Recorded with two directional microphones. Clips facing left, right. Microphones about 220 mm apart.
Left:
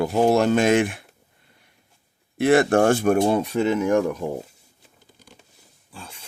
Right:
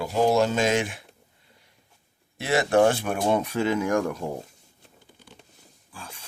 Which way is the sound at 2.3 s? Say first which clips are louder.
Left 5 dB; 55° left (ahead or behind).